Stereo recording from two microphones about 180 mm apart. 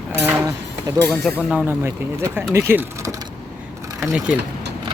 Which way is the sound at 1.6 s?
10° right (ahead or behind).